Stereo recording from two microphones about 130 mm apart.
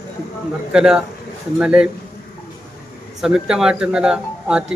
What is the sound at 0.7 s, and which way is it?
A man's voice, 5° right (ahead or behind).